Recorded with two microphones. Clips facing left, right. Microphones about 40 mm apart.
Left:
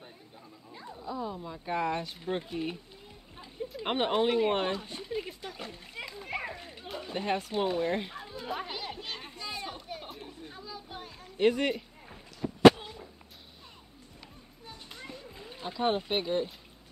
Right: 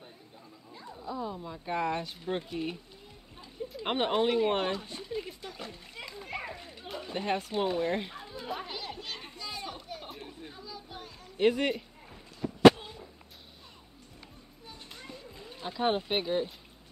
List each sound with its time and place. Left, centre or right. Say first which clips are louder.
0.9 s speech: even; centre
4.8 s speech: left 1 dB; centre
5.5 s splash: left 1 dB; centre
6.2 s children playing: left 2 dB; centre
6.8 s children playing: even; centre
8.5 s children playing: left 2 dB; centre
10.5 s a sound: left 1 dB; left
11.3 s speech: even; centre
15.0 s splash: left 1 dB; centre
15.6 s speech: even; centre